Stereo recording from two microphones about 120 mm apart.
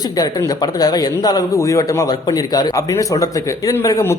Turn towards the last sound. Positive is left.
turn(degrees=25)  # may be behind; listen again after turning